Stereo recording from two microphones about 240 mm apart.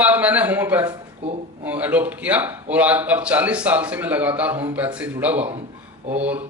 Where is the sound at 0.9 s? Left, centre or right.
Right.